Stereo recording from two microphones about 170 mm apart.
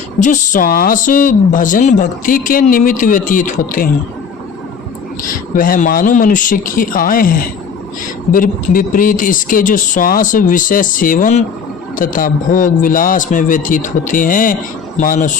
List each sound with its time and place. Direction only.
0.2 s speech: 50° left (ahead or behind)
5.3 s speech: 55° left (ahead or behind)